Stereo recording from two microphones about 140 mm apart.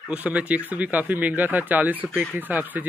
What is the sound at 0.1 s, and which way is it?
Speech, 10° right (ahead or behind).